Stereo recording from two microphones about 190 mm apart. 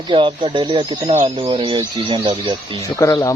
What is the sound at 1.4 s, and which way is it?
Speech, 25° right (ahead or behind).